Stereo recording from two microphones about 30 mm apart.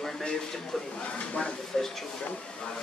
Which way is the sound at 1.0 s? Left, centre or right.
Left.